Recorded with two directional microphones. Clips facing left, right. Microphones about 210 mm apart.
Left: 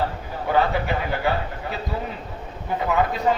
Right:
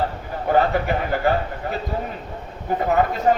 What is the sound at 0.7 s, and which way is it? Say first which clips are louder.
Speech: right 3 dB; 50° right (ahead or behind).